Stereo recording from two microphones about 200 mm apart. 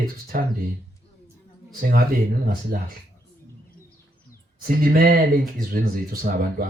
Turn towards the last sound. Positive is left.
turn(degrees=-45)  # may be behind; listen again after turning